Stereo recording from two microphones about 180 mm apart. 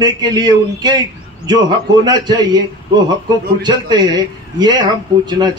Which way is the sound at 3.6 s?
25° right (ahead or behind).